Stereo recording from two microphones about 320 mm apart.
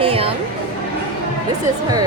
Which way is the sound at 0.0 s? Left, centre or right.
Centre.